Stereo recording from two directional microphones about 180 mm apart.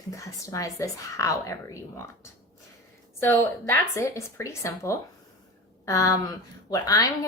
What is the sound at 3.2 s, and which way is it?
A woman's voice, 15° left (ahead or behind).